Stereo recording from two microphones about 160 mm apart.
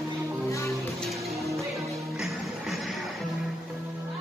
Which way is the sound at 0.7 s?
Centre (ahead or behind).